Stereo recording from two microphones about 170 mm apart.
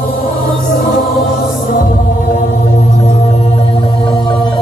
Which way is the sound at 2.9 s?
35° left (ahead or behind).